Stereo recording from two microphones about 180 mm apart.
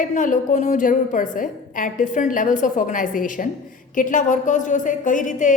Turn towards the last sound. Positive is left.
turn(degrees=45)  # may be behind; listen again after turning